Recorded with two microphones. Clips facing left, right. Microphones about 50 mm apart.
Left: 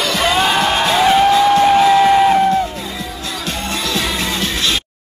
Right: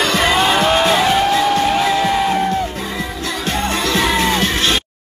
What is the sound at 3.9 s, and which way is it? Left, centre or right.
Music, right.